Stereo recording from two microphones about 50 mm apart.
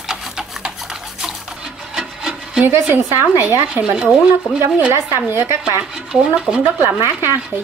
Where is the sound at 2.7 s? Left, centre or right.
Right.